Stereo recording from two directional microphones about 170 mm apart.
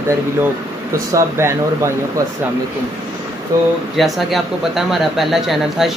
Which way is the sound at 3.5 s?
20° right (ahead or behind).